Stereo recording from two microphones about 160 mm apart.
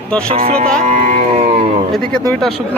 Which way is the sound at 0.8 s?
45° right (ahead or behind).